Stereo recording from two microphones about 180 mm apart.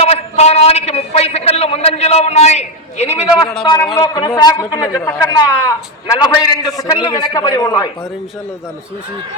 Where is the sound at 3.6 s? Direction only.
20° left (ahead or behind).